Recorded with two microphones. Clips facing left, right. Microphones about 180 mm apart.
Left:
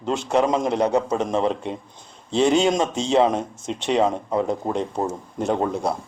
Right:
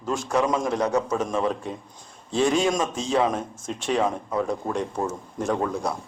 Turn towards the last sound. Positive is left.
turn(degrees=25)  # may be behind; listen again after turning